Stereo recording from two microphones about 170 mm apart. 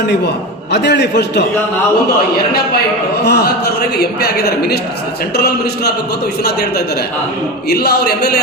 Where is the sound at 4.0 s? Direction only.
65° left (ahead or behind).